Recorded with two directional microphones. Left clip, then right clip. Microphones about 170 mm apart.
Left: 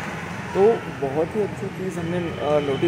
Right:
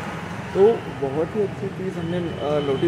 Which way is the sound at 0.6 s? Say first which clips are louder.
Right 1 dB; 15° right (ahead or behind).